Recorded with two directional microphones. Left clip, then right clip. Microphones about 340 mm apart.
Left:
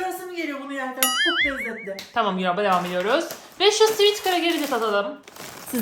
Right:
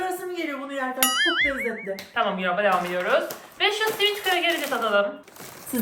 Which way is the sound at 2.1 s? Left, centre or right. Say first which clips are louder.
Left 1 dB; centre.